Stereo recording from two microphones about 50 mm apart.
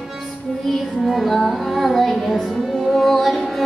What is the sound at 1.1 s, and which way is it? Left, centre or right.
Music, centre.